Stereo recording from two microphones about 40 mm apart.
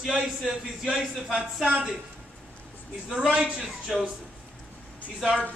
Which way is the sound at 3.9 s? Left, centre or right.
Centre.